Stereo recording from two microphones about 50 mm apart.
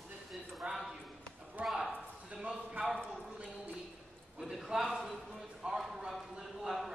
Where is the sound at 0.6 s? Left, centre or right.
Right.